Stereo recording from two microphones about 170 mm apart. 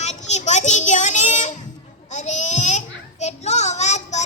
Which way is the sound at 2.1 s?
45° left (ahead or behind).